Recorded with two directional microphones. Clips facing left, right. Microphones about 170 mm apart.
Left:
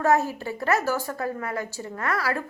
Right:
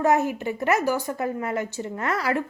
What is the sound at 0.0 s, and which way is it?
A woman's voice, 20° right (ahead or behind).